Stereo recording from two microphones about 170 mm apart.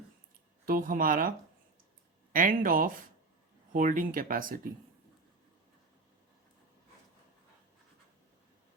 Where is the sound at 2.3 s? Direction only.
55° right (ahead or behind).